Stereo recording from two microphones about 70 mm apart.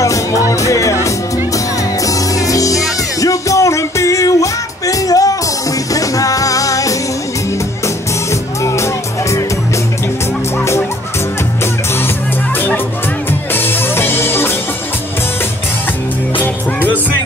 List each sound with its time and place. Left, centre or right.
0.0 s music: left
2.0 s music: left
8.3 s music: left
12.5 s music: left